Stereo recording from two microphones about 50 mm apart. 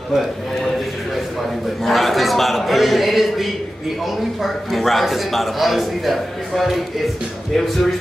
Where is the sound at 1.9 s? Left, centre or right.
Centre.